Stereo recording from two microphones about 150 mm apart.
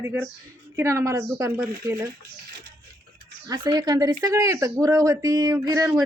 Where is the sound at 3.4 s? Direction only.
25° right (ahead or behind).